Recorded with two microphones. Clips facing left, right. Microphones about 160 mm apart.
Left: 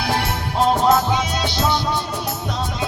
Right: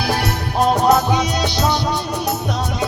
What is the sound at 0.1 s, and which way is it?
Music, 25° left (ahead or behind).